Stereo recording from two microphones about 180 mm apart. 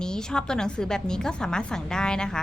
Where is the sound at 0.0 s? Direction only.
5° left (ahead or behind).